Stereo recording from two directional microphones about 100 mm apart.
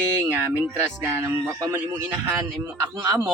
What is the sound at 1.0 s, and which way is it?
Speech, 30° right (ahead or behind).